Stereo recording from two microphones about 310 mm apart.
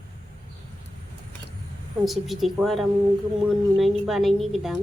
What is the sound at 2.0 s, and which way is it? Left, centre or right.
A woman's voice, centre.